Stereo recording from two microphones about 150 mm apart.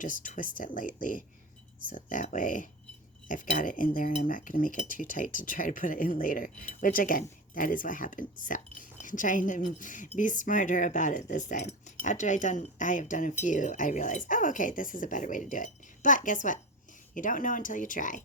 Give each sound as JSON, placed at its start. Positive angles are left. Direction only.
{"t": 0.0, "sound": "speech", "side_deg": 60}